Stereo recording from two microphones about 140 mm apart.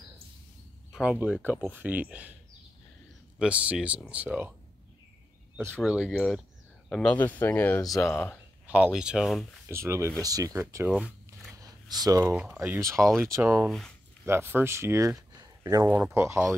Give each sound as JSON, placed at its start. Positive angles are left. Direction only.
{"t": 0.9, "sound": "speech", "side_deg": -10}
{"t": 3.3, "sound": "speech", "side_deg": -10}
{"t": 5.8, "sound": "speech", "side_deg": -5}
{"t": 8.6, "sound": "speech", "side_deg": -10}
{"t": 9.7, "sound": "speech", "side_deg": -20}
{"t": 10.9, "sound": "zipper", "side_deg": -5}
{"t": 11.6, "sound": "a sound", "side_deg": -25}
{"t": 12.5, "sound": "speech", "side_deg": -15}
{"t": 13.7, "sound": "speech", "side_deg": 0}
{"t": 14.2, "sound": "speech", "side_deg": -15}